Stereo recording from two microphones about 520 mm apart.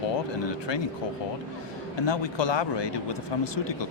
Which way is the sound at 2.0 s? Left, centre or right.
Left.